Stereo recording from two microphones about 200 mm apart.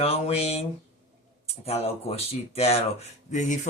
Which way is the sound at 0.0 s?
30° left (ahead or behind).